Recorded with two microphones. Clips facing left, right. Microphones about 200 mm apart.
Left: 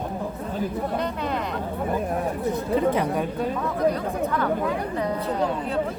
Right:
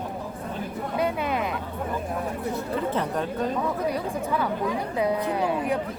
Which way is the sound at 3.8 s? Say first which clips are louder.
Left 4 dB; 10° right (ahead or behind).